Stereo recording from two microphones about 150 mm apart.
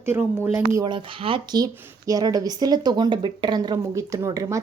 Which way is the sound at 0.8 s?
30° right (ahead or behind).